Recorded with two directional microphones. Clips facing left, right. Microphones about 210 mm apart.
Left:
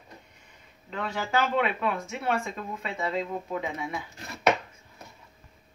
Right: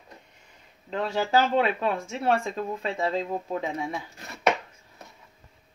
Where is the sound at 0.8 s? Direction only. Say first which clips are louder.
Right 5 dB; 30° right (ahead or behind).